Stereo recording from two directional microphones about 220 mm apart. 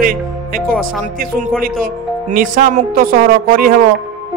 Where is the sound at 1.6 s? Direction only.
40° right (ahead or behind).